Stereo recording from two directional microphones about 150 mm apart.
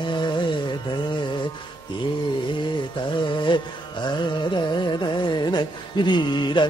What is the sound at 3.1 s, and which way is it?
Carnatic music, 30° left (ahead or behind).